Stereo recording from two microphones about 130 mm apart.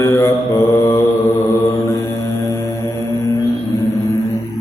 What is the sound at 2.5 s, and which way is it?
Music, 20° left (ahead or behind).